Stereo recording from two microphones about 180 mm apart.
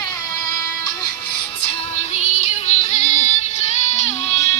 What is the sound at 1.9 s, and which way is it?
Music, 40° left (ahead or behind).